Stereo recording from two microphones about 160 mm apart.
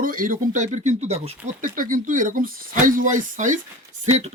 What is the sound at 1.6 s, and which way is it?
Speech, 55° right (ahead or behind).